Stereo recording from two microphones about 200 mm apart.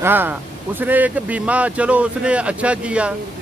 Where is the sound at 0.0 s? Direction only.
10° right (ahead or behind).